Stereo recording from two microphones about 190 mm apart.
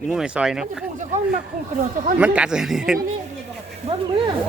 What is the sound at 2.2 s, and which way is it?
Speech, 5° right (ahead or behind).